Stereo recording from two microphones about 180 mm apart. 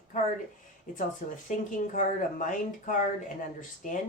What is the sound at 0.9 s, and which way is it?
Speech, 50° left (ahead or behind).